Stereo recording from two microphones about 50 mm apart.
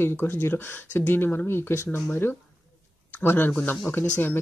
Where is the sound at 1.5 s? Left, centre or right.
Left.